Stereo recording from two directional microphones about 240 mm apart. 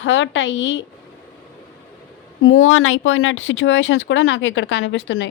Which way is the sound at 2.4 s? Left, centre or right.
Left.